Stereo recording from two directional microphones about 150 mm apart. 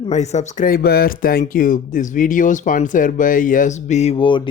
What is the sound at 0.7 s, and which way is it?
Speech, 90° left.